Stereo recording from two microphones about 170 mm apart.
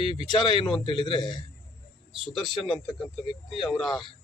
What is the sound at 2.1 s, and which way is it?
A man's voice, centre (ahead or behind).